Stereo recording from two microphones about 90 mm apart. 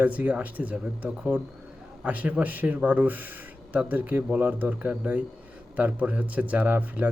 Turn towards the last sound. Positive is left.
turn(degrees=-20)  # may be behind; listen again after turning